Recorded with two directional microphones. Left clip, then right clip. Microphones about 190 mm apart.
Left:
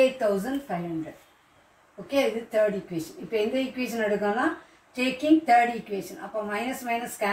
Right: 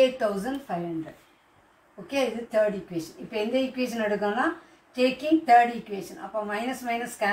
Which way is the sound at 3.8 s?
15° left (ahead or behind).